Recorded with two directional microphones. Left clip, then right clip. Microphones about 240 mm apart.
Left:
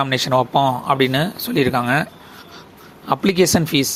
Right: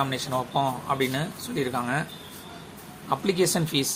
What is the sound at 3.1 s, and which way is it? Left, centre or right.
Speech, left.